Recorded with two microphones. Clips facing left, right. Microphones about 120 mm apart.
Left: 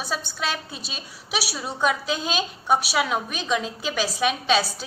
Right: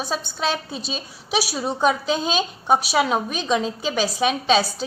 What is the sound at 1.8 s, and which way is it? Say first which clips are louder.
A woman's voice: right 3 dB; 35° right (ahead or behind).